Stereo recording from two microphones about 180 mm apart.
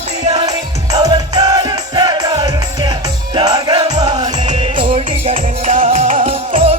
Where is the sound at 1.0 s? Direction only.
20° right (ahead or behind).